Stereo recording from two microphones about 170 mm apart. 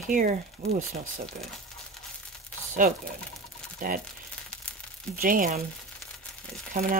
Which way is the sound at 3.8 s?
55° right (ahead or behind).